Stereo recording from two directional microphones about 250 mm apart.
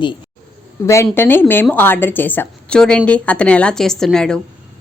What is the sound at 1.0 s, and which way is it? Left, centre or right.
A woman's voice, centre.